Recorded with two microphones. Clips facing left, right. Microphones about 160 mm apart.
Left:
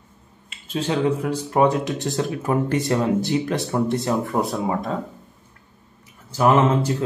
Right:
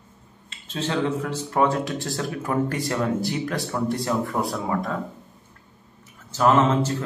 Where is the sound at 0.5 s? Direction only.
10° left (ahead or behind).